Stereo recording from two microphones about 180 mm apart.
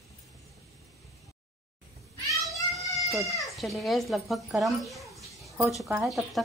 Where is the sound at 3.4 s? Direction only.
Centre (ahead or behind).